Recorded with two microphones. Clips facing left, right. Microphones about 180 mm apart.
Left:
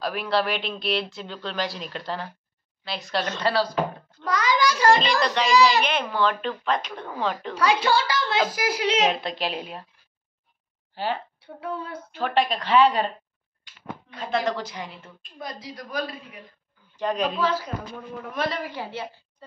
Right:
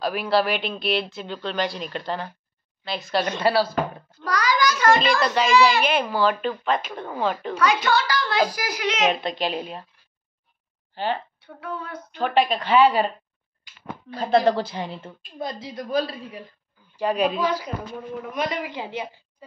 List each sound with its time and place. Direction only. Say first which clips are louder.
0.0 s speech: right 3 dB; 5° right (ahead or behind)
4.2 s a child's voice: even; 25° left (ahead or behind)
5.2 s speech: right 1 dB; 5° right (ahead or behind)
7.5 s a woman's voice: left 1 dB; 30° left (ahead or behind)
9.1 s speech: right 3 dB; centre (ahead or behind)
11.0 s speech: right 2 dB; 5° left (ahead or behind)
11.3 s a woman's voice: left 1 dB; 30° left (ahead or behind)
12.1 s speech: right 3 dB; centre (ahead or behind)
14.1 s a woman's voice: right 7 dB; 35° right (ahead or behind)
16.9 s a woman's voice: right 3 dB; 10° right (ahead or behind)